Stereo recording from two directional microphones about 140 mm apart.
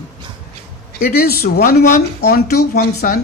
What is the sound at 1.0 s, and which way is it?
Speech, 90° left.